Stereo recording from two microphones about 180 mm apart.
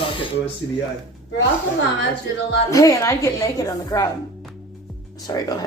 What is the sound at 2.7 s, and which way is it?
A woman's voice, 15° left (ahead or behind).